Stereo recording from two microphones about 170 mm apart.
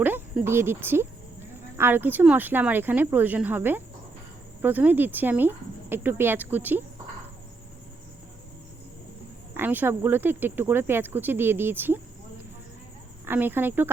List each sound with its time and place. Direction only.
0.0 s speech: 10° right (ahead or behind)
9.6 s speech: 10° right (ahead or behind)
13.2 s speech: 10° right (ahead or behind)